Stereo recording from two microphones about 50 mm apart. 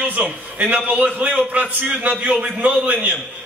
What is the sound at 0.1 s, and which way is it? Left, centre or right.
A man's voice, right.